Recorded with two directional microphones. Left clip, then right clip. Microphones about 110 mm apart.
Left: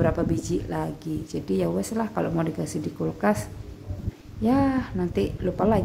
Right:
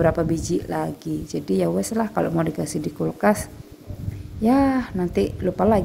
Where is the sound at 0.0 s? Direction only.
40° right (ahead or behind).